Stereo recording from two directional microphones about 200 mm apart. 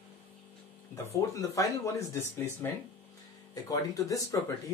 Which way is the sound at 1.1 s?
15° left (ahead or behind).